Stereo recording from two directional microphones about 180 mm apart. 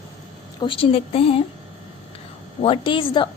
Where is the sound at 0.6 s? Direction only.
30° left (ahead or behind).